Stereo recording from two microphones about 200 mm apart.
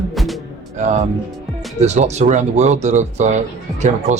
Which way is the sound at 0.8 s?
35° right (ahead or behind).